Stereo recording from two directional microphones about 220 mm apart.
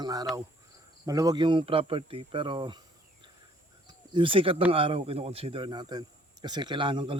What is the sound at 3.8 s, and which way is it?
Cricket, 20° right (ahead or behind).